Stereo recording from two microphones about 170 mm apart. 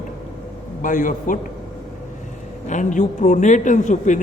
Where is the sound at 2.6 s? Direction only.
45° left (ahead or behind).